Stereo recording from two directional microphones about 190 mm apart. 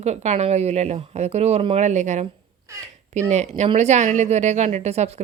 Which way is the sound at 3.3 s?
35° right (ahead or behind).